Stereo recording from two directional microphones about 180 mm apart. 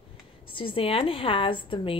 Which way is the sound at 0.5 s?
30° left (ahead or behind).